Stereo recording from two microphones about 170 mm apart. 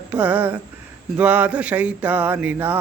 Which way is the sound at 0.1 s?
10° right (ahead or behind).